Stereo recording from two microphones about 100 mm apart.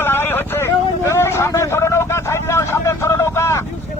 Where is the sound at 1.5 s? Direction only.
30° left (ahead or behind).